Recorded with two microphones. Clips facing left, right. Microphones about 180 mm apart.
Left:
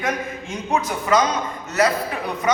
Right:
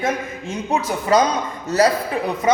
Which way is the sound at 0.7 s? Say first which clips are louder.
Right 2 dB; 35° right (ahead or behind).